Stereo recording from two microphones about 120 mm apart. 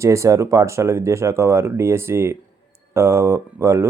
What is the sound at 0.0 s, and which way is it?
Speech, 25° right (ahead or behind).